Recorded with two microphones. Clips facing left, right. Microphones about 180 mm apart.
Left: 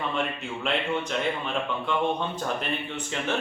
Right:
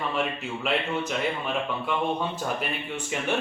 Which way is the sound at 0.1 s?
5° right (ahead or behind).